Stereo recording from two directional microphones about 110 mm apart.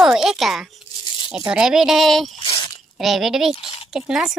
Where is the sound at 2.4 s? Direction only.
55° left (ahead or behind).